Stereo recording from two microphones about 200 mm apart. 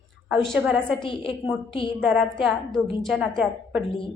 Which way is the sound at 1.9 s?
Centre (ahead or behind).